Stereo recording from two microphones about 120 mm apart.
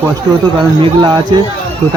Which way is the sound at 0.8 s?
40° right (ahead or behind).